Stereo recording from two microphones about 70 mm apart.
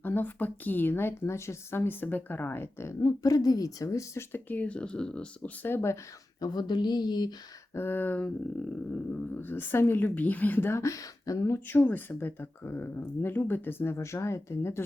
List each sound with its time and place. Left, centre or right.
0.0 s a woman's voice: left
3.0 s speech: left
4.3 s speech: left
5.6 s speech: left
6.4 s speech: left
7.8 s a woman's voice: left
9.4 s a woman's voice: left
10.8 s speech: left
11.8 s a woman's voice: left